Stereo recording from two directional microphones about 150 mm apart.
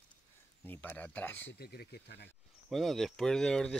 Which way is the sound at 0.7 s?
10° left (ahead or behind).